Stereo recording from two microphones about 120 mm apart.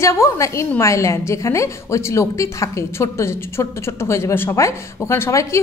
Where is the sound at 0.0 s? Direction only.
25° left (ahead or behind).